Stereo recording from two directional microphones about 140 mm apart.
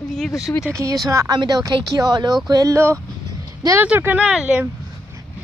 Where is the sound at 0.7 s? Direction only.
20° right (ahead or behind).